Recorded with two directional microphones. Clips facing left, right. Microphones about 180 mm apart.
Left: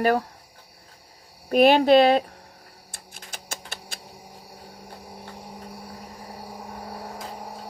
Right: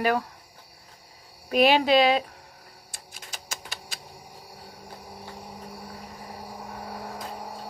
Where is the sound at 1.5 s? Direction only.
50° left (ahead or behind).